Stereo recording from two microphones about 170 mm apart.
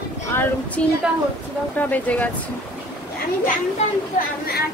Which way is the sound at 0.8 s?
10° left (ahead or behind).